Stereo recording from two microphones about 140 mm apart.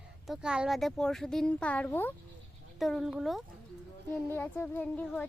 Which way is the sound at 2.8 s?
Centre (ahead or behind).